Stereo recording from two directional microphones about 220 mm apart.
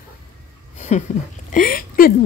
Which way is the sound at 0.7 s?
30° left (ahead or behind).